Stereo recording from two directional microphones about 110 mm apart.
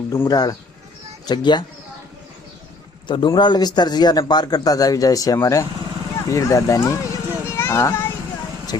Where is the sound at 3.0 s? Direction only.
45° left (ahead or behind); by 6.9 s 30° left (ahead or behind).